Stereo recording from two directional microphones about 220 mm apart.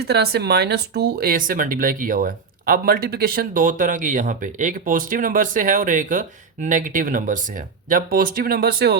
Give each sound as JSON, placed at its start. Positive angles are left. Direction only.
{"t": 0.0, "sound": "speech", "side_deg": -45}